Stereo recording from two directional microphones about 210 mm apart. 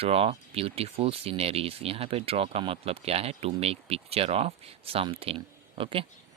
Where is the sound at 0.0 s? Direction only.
30° right (ahead or behind).